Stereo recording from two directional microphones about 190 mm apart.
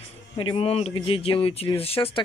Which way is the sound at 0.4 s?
30° left (ahead or behind).